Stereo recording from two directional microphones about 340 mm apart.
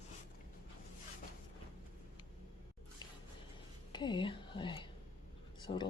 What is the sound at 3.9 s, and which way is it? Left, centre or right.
Speech, centre.